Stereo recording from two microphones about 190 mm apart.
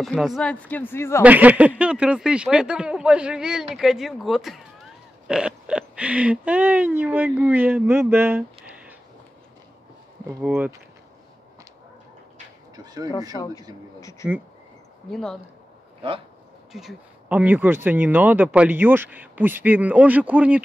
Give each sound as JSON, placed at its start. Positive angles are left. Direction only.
{"t": 0.0, "sound": "speech", "side_deg": 0}
{"t": 1.2, "sound": "speech", "side_deg": -10}
{"t": 10.2, "sound": "speech", "side_deg": -10}
{"t": 12.7, "sound": "speech", "side_deg": -20}
{"t": 14.2, "sound": "speech", "side_deg": -5}
{"t": 16.7, "sound": "speech", "side_deg": -5}